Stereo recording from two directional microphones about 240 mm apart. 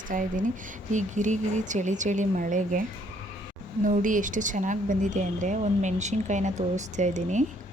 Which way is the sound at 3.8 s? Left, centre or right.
Right.